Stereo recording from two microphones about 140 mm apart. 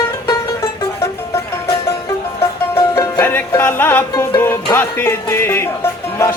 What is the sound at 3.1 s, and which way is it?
Music, 15° left (ahead or behind).